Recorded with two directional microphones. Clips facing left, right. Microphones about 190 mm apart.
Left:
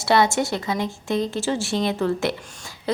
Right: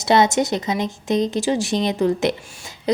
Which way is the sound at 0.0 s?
20° right (ahead or behind).